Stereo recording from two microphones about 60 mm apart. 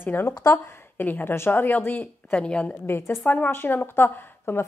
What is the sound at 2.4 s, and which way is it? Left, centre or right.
A woman's voice, centre.